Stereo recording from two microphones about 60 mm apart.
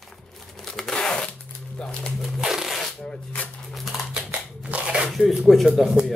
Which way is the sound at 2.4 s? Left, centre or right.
Centre.